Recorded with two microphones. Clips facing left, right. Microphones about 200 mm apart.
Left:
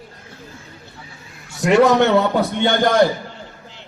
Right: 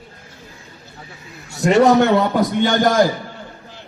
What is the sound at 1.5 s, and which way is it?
Speech, 40° right (ahead or behind).